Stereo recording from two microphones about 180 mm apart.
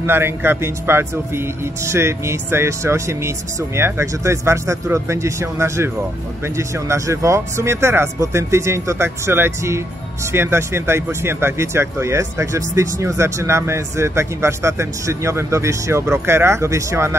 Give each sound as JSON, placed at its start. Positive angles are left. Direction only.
{"t": 0.0, "sound": "speech", "side_deg": -15}